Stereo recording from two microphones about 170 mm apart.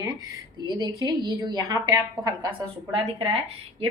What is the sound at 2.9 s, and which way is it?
Speech, 30° right (ahead or behind).